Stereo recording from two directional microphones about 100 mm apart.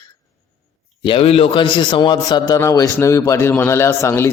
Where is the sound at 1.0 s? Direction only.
70° left (ahead or behind); by 2.6 s 45° left (ahead or behind).